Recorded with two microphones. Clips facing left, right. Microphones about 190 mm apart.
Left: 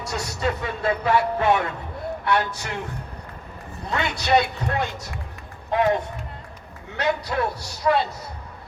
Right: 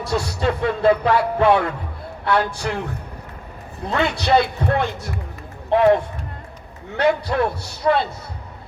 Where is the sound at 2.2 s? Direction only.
30° right (ahead or behind).